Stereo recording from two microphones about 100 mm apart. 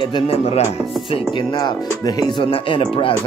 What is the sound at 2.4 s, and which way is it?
Speech, 65° left (ahead or behind).